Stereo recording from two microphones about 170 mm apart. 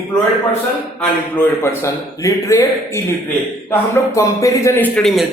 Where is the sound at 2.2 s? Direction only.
20° left (ahead or behind).